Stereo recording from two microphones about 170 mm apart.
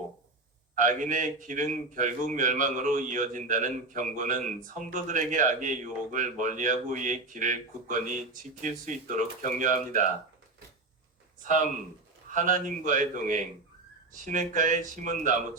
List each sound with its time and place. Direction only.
0.8 s a man's voice: 50° right (ahead or behind)
12.3 s a man's voice: 50° right (ahead or behind)